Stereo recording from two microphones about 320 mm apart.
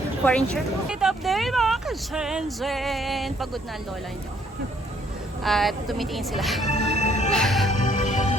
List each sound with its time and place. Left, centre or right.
0.3 s speech: centre
5.4 s speech: centre
6.7 s music: left
7.3 s music: centre
7.7 s music: left